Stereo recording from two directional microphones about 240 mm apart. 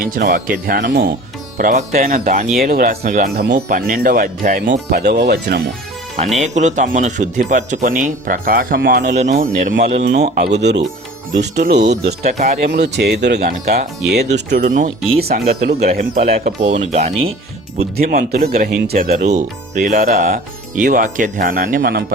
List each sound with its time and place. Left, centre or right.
0.1 s speech: right
6.4 s speech: right
9.2 s speech: right
12.2 s speech: right
12.5 s speech: right
18.0 s speech: right